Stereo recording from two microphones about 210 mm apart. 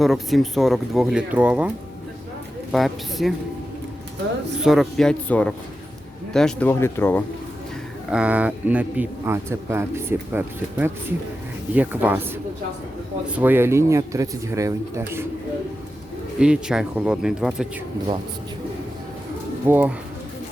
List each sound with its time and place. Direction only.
0.0 s speech: centre (ahead or behind)
2.7 s speech: centre (ahead or behind)
4.6 s speech: centre (ahead or behind)
8.1 s a man's voice: 5° right (ahead or behind)
16.4 s speech: 5° right (ahead or behind)
19.6 s a man's voice: 10° right (ahead or behind)